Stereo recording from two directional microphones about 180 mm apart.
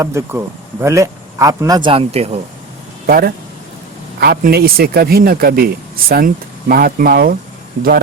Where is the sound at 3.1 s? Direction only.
55° right (ahead or behind).